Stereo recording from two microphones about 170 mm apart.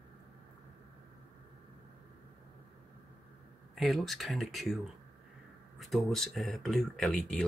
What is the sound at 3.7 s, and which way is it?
Speech, centre (ahead or behind).